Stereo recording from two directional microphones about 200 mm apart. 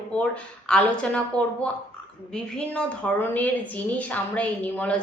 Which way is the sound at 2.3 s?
5° left (ahead or behind).